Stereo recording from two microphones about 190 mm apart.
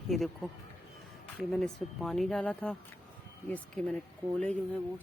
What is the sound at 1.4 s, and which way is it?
Speech, centre (ahead or behind).